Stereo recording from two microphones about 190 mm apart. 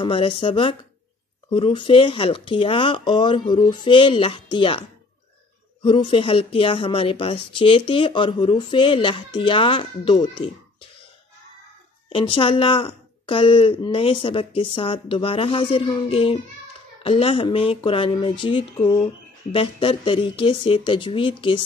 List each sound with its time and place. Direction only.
0.0 s speech: 25° left (ahead or behind)
12.1 s speech: 25° left (ahead or behind)